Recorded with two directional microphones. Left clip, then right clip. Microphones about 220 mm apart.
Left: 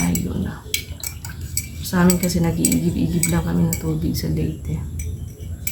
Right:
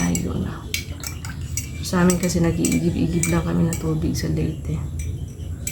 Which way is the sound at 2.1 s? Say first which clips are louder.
Even; centre (ahead or behind).